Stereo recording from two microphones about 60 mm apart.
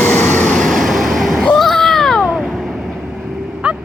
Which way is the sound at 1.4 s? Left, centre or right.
Centre.